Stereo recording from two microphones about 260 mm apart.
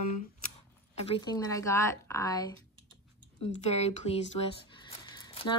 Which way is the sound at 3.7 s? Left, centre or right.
Left.